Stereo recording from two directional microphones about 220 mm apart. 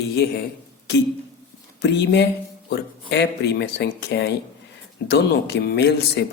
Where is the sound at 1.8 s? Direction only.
50° left (ahead or behind).